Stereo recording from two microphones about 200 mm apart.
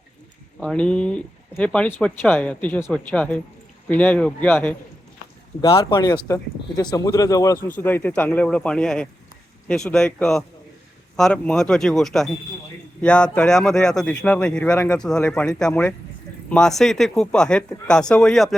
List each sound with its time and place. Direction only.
0.6 s speech: 5° left (ahead or behind)
5.7 s speech: 20° left (ahead or behind); by 18.5 s centre (ahead or behind)